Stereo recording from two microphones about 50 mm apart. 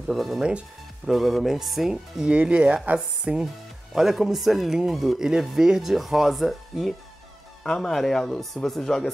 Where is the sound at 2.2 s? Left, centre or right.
Right.